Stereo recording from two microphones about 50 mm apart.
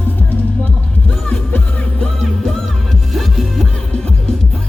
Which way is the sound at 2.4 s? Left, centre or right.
Centre.